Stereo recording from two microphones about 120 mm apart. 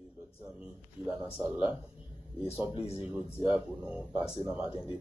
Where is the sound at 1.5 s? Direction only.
40° left (ahead or behind).